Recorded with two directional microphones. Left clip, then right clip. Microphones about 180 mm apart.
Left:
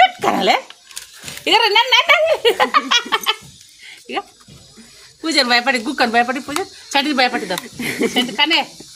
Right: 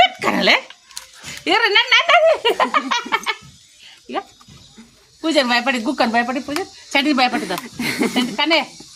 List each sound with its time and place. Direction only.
0.2 s dog: 25° right (ahead or behind)
1.5 s speech: 5° right (ahead or behind)
5.2 s speech: 10° right (ahead or behind)
6.9 s speech: 15° right (ahead or behind)